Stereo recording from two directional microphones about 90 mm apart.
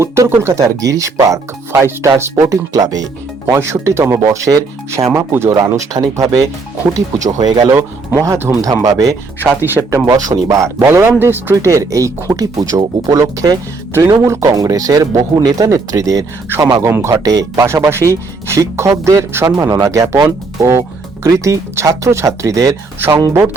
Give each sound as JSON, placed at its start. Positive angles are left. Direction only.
{"t": 0.0, "sound": "speech", "side_deg": -30}
{"t": 3.5, "sound": "speech", "side_deg": -30}
{"t": 5.6, "sound": "speech", "side_deg": -40}
{"t": 8.6, "sound": "speech", "side_deg": -40}
{"t": 9.6, "sound": "speech", "side_deg": -25}
{"t": 10.1, "sound": "speech", "side_deg": -40}
{"t": 11.5, "sound": "speech", "side_deg": -35}
{"t": 23.0, "sound": "speech", "side_deg": -25}